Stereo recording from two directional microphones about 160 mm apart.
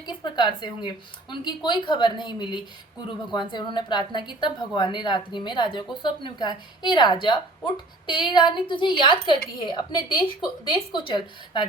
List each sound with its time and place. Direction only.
0.0 s a woman's voice: 30° left (ahead or behind)